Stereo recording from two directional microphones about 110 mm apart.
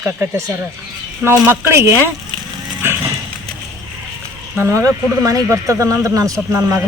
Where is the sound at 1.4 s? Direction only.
20° right (ahead or behind).